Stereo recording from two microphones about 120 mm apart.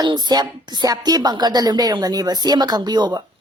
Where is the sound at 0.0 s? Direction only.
35° right (ahead or behind).